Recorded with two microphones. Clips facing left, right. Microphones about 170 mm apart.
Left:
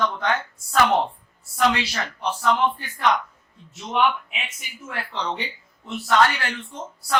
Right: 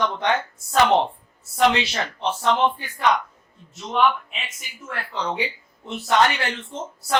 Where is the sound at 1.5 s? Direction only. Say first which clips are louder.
Right 2 dB; 25° right (ahead or behind).